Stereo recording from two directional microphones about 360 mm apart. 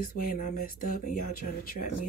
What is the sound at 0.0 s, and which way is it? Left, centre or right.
Speech, left.